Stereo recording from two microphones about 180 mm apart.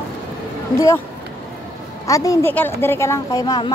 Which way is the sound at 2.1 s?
20° left (ahead or behind).